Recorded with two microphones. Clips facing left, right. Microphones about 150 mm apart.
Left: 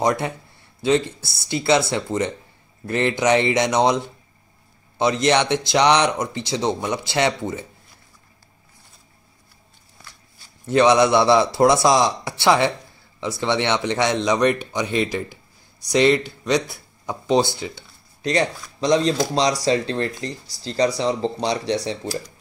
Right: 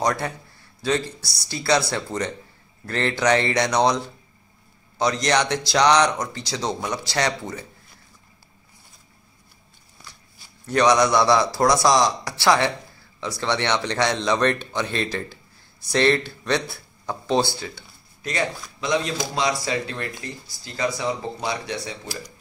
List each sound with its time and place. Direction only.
0.0 s speech: 25° left (ahead or behind)
10.7 s speech: 25° left (ahead or behind)
18.2 s speech: 35° left (ahead or behind)